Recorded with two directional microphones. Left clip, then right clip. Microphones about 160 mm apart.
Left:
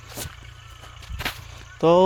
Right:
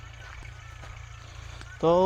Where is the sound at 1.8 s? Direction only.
40° left (ahead or behind).